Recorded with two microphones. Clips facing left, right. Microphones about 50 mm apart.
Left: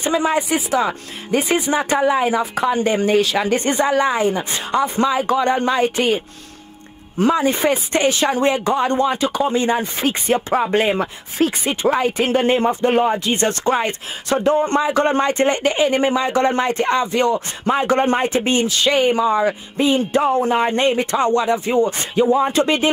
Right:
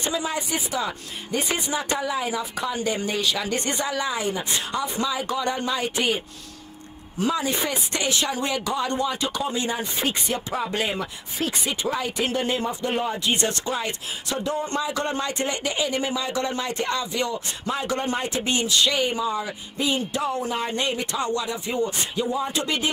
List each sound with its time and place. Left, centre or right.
0.1 s speech: left
19.8 s speech: left